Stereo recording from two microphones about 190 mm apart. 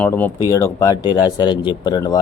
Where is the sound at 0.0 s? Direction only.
10° left (ahead or behind).